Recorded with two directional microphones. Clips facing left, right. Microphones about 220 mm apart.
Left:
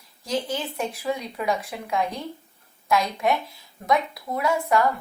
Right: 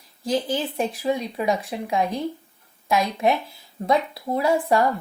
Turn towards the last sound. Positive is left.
turn(degrees=-30)  # may be behind; listen again after turning